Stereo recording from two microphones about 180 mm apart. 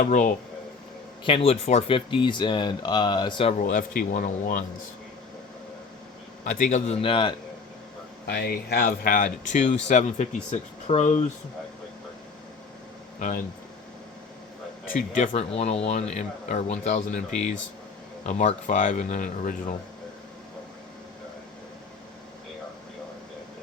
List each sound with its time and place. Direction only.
0.0 s speech: 45° left (ahead or behind)
1.2 s speech: 30° left (ahead or behind)
3.6 s speech: 50° left (ahead or behind)
6.4 s speech: 45° left (ahead or behind); by 7.3 s 30° left (ahead or behind)
8.3 s speech: 60° left (ahead or behind); by 11.3 s 40° left (ahead or behind)
13.1 s speech: 45° left (ahead or behind)
14.9 s speech: 40° left (ahead or behind)